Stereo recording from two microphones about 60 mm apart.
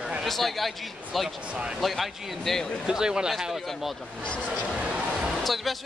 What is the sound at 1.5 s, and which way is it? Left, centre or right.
Speech, centre.